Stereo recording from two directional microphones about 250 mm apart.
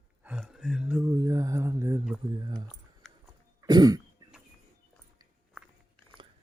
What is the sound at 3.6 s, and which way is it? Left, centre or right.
Cough, centre.